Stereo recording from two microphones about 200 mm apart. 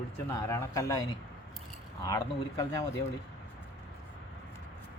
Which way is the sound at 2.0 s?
20° left (ahead or behind).